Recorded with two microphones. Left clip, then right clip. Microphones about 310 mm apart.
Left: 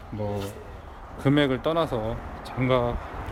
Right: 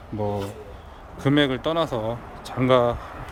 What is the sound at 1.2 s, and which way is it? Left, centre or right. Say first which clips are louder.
A man's voice: right 2 dB; centre.